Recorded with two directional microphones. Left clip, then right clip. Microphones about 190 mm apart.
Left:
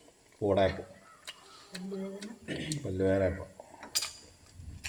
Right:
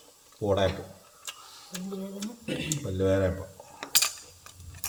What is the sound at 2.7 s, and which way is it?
Speech, 5° right (ahead or behind).